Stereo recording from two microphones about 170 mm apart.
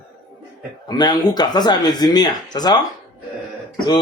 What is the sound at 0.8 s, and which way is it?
Speech, 25° left (ahead or behind).